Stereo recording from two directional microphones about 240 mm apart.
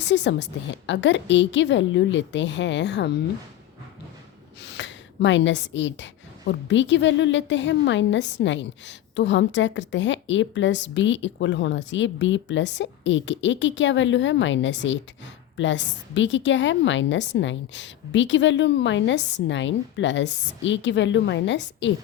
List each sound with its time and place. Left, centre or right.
0.0 s a woman's voice: left
4.6 s a woman's voice: left